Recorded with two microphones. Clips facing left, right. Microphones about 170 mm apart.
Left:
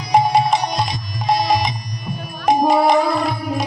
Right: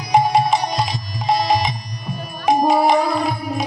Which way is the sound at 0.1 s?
Centre (ahead or behind).